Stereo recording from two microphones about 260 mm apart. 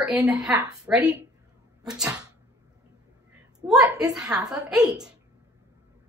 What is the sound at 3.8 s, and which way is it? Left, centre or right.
Speech, centre.